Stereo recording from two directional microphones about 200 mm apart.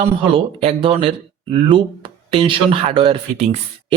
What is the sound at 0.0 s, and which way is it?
Speech, 30° right (ahead or behind).